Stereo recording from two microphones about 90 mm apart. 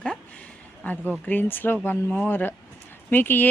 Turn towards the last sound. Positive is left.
turn(degrees=20)  # may be behind; listen again after turning